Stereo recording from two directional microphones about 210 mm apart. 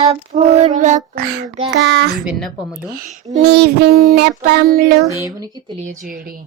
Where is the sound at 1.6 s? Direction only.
55° right (ahead or behind).